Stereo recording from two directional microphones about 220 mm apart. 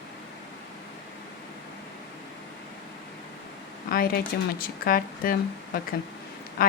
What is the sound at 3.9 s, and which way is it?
A woman's voice, 45° left (ahead or behind).